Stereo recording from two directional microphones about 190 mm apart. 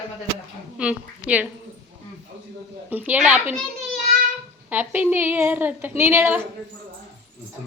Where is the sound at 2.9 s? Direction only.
10° right (ahead or behind).